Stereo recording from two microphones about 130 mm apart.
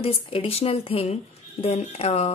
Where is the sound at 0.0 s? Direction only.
45° left (ahead or behind).